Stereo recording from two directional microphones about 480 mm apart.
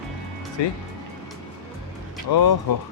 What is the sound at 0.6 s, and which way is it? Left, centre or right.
Speech, left.